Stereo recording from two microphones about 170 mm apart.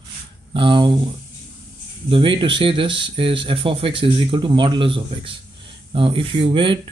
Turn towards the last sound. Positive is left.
turn(degrees=-30)  # may be behind; listen again after turning